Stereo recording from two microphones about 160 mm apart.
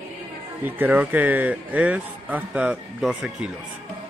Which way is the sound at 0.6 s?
10° right (ahead or behind).